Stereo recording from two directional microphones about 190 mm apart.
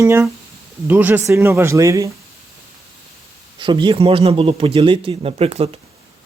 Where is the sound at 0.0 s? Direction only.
15° right (ahead or behind).